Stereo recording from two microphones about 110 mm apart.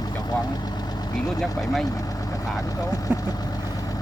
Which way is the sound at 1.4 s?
Centre (ahead or behind).